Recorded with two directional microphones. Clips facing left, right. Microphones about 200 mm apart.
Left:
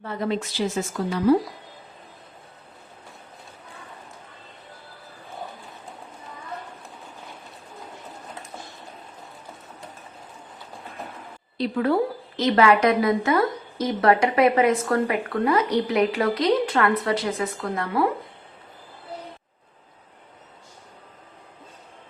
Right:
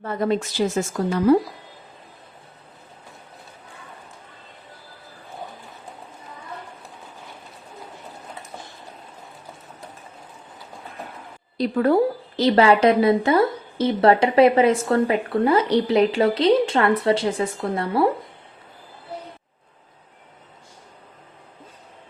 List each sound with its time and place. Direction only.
0.0 s a woman's voice: 45° right (ahead or behind)
11.5 s a woman's voice: 45° right (ahead or behind)
12.4 s a woman's voice: 30° right (ahead or behind)